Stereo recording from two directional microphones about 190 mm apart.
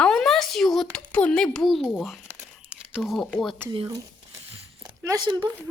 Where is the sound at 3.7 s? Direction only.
30° right (ahead or behind).